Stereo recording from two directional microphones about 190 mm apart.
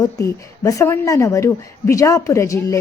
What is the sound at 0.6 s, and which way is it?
A woman's voice, 15° left (ahead or behind).